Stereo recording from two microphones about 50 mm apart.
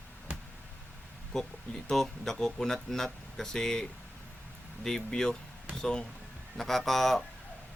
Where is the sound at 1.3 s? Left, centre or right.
Centre.